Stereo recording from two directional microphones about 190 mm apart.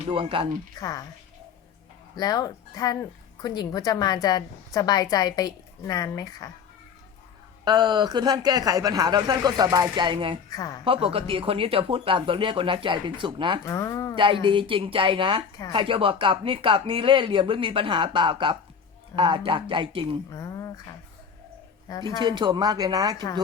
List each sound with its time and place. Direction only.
0.1 s speech: 30° right (ahead or behind)
0.8 s a woman's voice: 20° left (ahead or behind)
2.1 s a woman's voice: 20° left (ahead or behind)
7.6 s speech: 20° right (ahead or behind)
10.5 s a woman's voice: 20° left (ahead or behind)
10.8 s speech: 30° right (ahead or behind)
13.7 s speech: 15° left (ahead or behind)
14.4 s speech: 25° right (ahead or behind)
20.3 s a woman's voice: 20° left (ahead or behind)
22.2 s speech: 25° right (ahead or behind)